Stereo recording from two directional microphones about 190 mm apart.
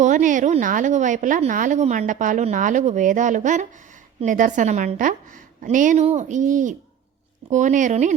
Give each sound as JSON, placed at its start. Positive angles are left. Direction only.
{"t": 0.0, "sound": "a woman's voice", "side_deg": -40}